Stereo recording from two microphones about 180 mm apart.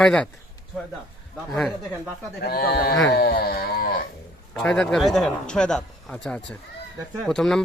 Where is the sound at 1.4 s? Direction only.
Centre (ahead or behind).